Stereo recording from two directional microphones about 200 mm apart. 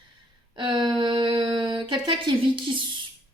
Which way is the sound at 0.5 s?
25° right (ahead or behind).